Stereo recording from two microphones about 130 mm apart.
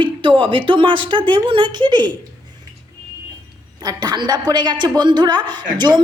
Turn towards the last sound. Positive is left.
turn(degrees=-35)  # may be behind; listen again after turning